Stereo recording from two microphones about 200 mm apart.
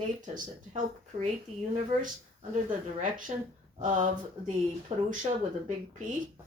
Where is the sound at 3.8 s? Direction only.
40° right (ahead or behind).